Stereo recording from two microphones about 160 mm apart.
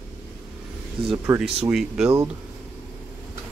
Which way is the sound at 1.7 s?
5° right (ahead or behind).